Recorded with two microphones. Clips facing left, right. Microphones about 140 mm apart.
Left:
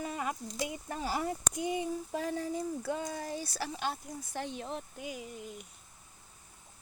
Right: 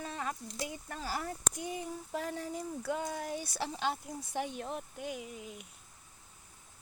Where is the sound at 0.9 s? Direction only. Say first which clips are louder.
Left 5 dB; 15° left (ahead or behind).